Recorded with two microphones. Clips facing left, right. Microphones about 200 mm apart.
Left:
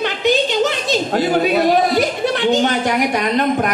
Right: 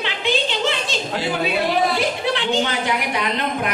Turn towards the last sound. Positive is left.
turn(degrees=45)  # may be behind; listen again after turning